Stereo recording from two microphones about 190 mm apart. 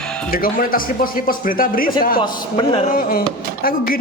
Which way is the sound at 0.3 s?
50° left (ahead or behind).